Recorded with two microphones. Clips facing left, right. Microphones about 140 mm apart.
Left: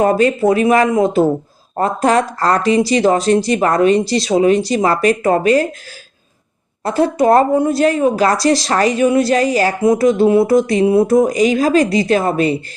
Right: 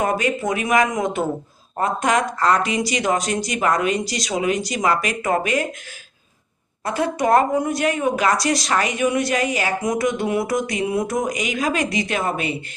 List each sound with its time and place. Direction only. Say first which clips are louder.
0.0 s a woman's voice: left 8 dB; 35° left (ahead or behind)
6.8 s a woman's voice: left 7 dB; 30° left (ahead or behind)